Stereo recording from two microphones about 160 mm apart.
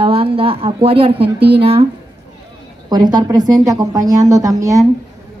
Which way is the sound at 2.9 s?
25° right (ahead or behind).